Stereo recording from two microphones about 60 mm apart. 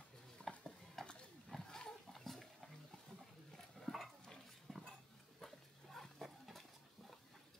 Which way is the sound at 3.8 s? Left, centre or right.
Centre.